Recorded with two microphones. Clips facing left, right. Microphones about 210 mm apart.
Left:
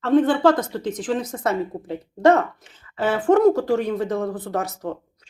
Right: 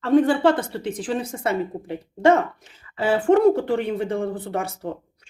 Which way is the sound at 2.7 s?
10° right (ahead or behind).